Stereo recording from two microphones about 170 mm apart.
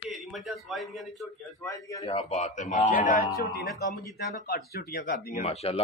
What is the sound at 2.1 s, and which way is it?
Speech, 30° left (ahead or behind).